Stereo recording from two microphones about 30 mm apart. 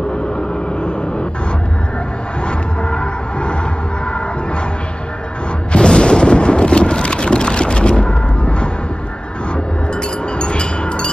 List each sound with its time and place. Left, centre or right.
0.7 s vehicle: left
2.4 s music: left
5.8 s boat: left
10.3 s a sound: left